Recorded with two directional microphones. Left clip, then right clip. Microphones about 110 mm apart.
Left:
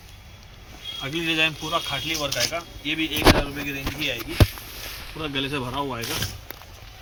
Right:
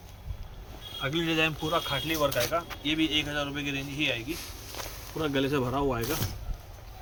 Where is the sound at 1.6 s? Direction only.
15° right (ahead or behind).